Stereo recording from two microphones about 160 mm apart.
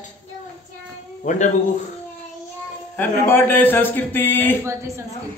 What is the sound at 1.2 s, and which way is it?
Speech, 50° left (ahead or behind).